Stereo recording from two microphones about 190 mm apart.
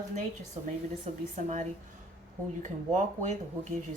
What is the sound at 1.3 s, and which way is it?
A woman's voice, 40° right (ahead or behind).